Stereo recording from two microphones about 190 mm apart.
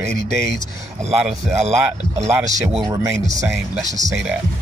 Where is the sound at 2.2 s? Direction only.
15° right (ahead or behind).